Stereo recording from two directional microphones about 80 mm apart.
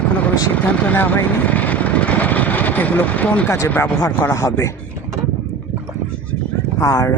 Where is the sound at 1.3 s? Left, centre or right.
Centre.